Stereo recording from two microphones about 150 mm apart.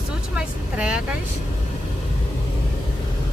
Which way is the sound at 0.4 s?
5° right (ahead or behind).